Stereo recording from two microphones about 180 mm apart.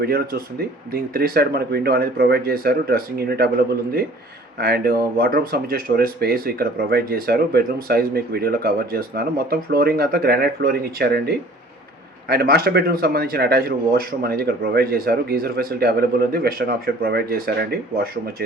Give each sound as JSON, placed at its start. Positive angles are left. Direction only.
{"t": 0.0, "sound": "speech", "side_deg": -55}
{"t": 4.6, "sound": "speech", "side_deg": -55}